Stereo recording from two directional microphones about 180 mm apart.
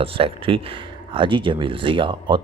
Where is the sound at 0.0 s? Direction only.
30° right (ahead or behind).